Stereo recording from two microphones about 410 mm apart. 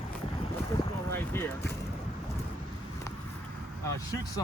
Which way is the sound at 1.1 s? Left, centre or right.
Centre.